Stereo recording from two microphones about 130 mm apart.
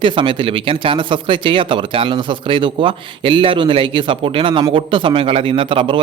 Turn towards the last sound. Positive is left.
turn(degrees=-40)  # may be behind; listen again after turning